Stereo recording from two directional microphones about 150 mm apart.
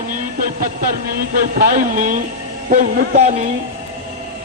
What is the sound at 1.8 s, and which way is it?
Speech, 60° right (ahead or behind).